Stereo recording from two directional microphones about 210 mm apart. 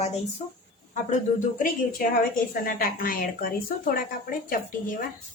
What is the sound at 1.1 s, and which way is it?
Speech, 40° left (ahead or behind).